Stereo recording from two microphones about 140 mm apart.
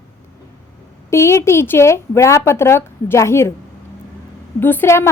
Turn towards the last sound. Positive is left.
turn(degrees=15)  # may be behind; listen again after turning